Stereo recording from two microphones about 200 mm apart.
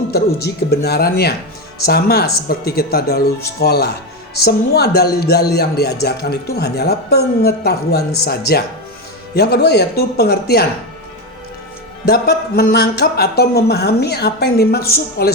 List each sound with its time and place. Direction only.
0.1 s speech: 55° left (ahead or behind)
12.0 s speech: 50° left (ahead or behind)